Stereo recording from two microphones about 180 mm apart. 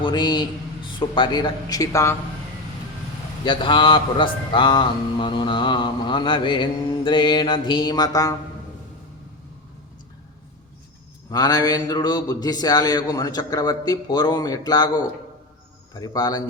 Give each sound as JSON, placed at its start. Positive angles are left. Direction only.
{"t": 0.0, "sound": "speech", "side_deg": 25}
{"t": 3.4, "sound": "speech", "side_deg": 25}
{"t": 11.3, "sound": "speech", "side_deg": 20}